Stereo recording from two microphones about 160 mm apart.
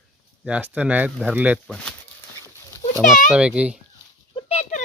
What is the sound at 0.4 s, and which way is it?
Speech, 10° right (ahead or behind).